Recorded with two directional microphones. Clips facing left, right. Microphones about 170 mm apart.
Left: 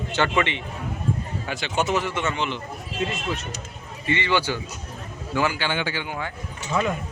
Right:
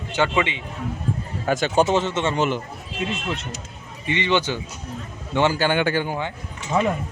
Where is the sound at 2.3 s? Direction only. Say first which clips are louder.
Right 6 dB; 45° right (ahead or behind).